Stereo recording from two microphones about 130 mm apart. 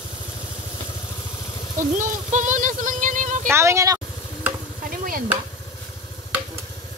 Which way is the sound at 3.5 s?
20° right (ahead or behind).